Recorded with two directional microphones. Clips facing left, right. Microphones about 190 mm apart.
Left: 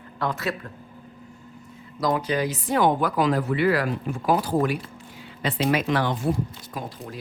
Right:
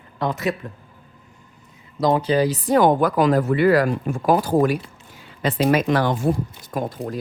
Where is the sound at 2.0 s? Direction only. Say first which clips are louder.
Right 6 dB; 30° right (ahead or behind).